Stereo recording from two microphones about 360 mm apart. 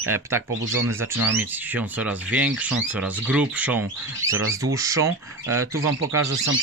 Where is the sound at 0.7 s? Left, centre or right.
Centre.